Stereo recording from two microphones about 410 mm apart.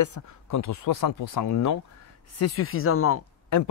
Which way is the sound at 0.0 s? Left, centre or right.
Left.